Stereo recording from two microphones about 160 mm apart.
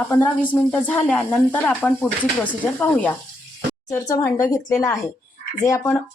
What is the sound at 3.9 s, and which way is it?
Speech, 15° left (ahead or behind).